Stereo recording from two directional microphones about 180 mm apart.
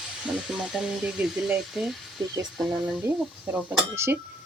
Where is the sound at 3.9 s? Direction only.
15° right (ahead or behind).